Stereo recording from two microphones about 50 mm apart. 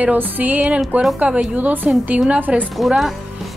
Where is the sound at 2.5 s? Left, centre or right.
Right.